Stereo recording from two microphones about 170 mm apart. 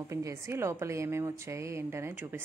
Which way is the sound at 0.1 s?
15° right (ahead or behind).